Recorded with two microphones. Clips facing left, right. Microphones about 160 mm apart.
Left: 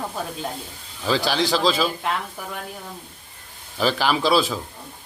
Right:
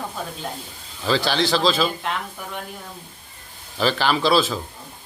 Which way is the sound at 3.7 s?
5° left (ahead or behind).